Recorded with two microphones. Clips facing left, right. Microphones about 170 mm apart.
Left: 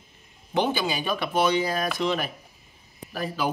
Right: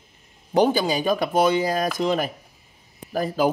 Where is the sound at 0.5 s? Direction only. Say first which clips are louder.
Right 6 dB; 40° right (ahead or behind).